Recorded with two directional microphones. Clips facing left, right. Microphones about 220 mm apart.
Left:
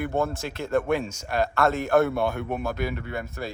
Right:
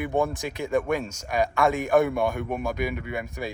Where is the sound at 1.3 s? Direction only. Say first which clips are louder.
Even; 15° right (ahead or behind).